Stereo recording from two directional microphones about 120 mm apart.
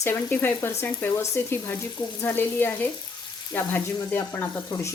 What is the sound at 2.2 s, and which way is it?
Frying, 20° left (ahead or behind).